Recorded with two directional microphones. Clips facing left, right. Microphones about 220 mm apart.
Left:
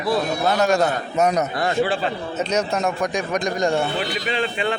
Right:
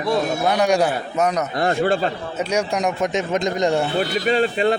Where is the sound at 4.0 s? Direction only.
40° right (ahead or behind).